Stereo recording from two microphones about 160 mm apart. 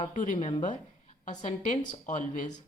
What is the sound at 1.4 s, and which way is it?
Speech, 50° left (ahead or behind).